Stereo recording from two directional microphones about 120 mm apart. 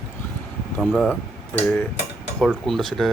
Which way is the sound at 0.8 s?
5° right (ahead or behind).